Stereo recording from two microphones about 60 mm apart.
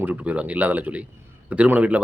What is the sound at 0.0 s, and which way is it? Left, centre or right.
Speech, right.